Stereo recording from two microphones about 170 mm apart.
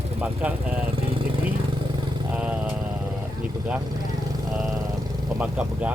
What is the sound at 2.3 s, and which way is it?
Vehicle, 5° right (ahead or behind).